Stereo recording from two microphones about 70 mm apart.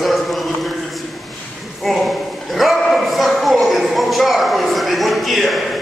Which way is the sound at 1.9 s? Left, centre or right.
Centre.